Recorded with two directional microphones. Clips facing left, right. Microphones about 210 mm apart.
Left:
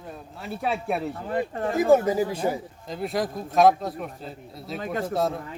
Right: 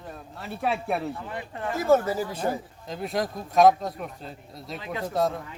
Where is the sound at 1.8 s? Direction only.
15° left (ahead or behind).